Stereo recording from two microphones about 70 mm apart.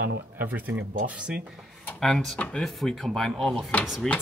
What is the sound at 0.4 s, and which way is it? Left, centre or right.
Speech, right.